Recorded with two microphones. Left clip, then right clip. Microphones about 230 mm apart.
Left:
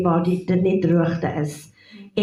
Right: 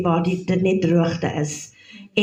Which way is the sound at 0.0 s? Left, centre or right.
Right.